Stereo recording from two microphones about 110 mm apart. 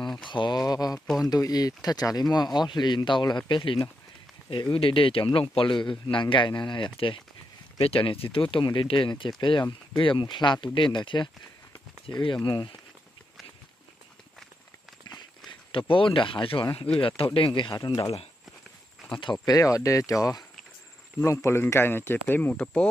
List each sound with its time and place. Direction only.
0.2 s speech: 45° left (ahead or behind)
0.7 s a sound: 40° left (ahead or behind)
1.2 s speech: 35° left (ahead or behind)
15.9 s speech: 55° left (ahead or behind)
17.7 s speech: 35° left (ahead or behind)
19.1 s speech: 45° left (ahead or behind); by 22.8 s 10° left (ahead or behind)